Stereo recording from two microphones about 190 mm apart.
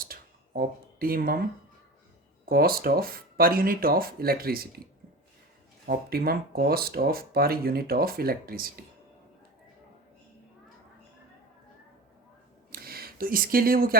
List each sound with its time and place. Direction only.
0.0 s a sound: 50° right (ahead or behind)
2.5 s speech: 50° right (ahead or behind)
5.8 s speech: 55° right (ahead or behind)
12.7 s speech: 50° right (ahead or behind)